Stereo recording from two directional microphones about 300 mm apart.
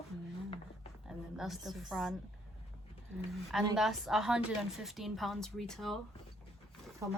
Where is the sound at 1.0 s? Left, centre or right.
Centre.